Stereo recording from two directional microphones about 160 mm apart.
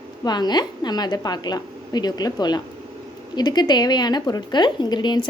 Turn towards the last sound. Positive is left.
turn(degrees=30)  # may be behind; listen again after turning